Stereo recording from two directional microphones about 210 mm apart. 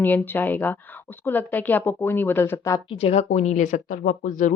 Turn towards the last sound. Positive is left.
turn(degrees=40)  # may be behind; listen again after turning